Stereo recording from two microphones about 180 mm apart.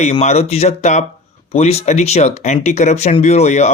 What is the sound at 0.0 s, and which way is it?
Speech, 40° left (ahead or behind).